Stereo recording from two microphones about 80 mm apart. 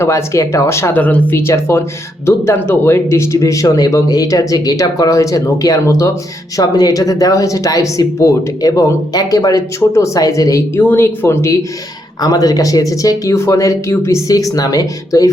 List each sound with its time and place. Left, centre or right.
0.0 s speech: left
0.9 s speech: left
6.6 s speech: left
10.8 s speech: left
12.2 s speech: left